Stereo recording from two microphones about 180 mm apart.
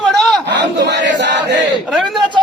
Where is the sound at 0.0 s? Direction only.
Centre (ahead or behind).